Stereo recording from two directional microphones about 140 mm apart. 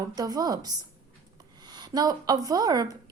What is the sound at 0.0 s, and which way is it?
A woman's voice, 25° right (ahead or behind).